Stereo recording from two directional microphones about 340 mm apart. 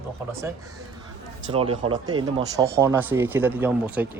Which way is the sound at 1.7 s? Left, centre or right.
Centre.